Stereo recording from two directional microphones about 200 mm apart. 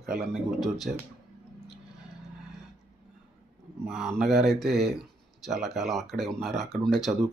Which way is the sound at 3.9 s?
Centre (ahead or behind).